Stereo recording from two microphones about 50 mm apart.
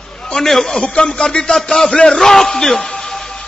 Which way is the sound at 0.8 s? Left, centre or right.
Centre.